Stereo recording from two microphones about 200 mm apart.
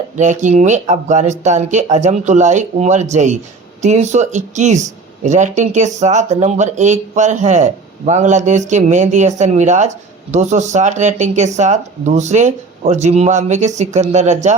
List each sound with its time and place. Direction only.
0.2 s speech: 35° right (ahead or behind)